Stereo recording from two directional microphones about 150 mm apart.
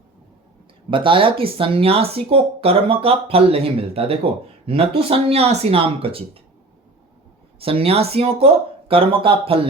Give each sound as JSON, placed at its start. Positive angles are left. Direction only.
{"t": 0.9, "sound": "speech", "side_deg": -35}
{"t": 7.6, "sound": "speech", "side_deg": -40}